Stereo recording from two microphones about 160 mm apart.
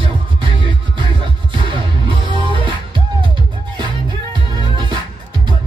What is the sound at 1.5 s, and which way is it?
Music, 30° right (ahead or behind).